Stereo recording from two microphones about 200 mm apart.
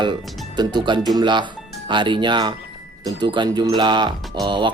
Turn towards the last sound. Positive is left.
turn(degrees=-25)  # may be behind; listen again after turning